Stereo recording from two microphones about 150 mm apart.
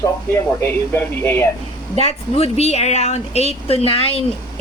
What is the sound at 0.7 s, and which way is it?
Speech, 15° left (ahead or behind).